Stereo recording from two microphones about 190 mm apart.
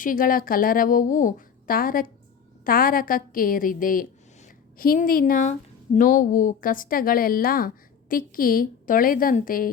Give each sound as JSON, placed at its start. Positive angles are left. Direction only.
{"t": 0.0, "sound": "a woman's voice", "side_deg": 45}